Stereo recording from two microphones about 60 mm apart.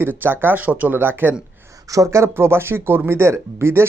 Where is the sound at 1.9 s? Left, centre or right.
Right.